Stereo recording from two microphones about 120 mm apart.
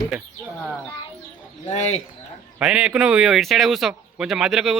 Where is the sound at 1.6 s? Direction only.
65° left (ahead or behind).